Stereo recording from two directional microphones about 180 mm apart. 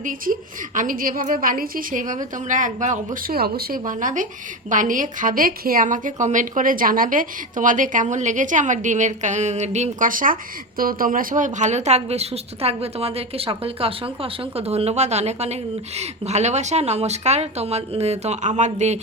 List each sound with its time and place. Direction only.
0.0 s a woman's voice: 45° right (ahead or behind)